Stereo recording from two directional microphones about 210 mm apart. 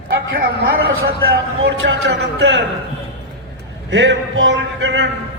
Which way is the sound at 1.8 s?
60° right (ahead or behind).